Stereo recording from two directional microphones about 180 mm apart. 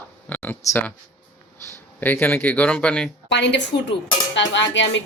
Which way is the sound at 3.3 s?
75° left (ahead or behind).